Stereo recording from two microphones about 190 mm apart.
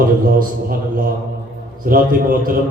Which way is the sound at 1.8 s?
50° right (ahead or behind).